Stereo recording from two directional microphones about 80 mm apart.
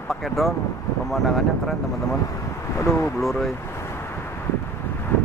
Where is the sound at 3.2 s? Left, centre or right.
Centre.